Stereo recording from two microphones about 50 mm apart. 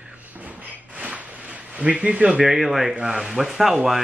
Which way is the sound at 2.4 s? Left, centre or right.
Centre.